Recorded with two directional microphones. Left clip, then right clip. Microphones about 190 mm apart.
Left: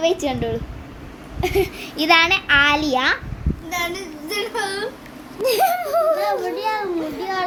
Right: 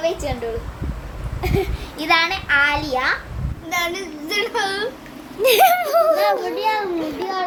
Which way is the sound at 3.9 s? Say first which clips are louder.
Right 2 dB; 45° right (ahead or behind).